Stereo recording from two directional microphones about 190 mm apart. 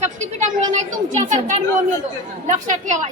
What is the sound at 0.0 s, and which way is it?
A woman's voice, 40° right (ahead or behind).